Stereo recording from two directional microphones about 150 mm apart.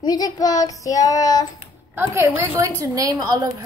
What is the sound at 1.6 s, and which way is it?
A woman's voice, 15° right (ahead or behind).